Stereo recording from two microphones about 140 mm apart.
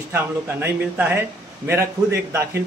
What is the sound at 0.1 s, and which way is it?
Speech, 15° right (ahead or behind).